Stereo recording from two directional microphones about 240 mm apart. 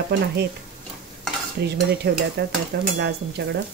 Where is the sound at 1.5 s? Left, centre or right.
Right.